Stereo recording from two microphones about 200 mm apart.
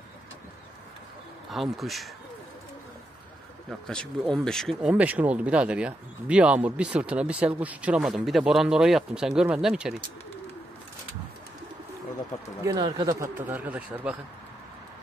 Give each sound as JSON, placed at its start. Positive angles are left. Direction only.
{"t": 1.5, "sound": "speech", "side_deg": 0}
{"t": 3.8, "sound": "speech", "side_deg": 5}
{"t": 12.6, "sound": "speech", "side_deg": -20}